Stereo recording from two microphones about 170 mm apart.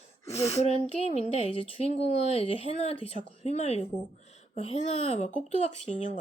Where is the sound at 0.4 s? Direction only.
40° left (ahead or behind).